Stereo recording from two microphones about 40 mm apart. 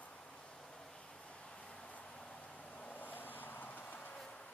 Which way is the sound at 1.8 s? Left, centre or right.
Left.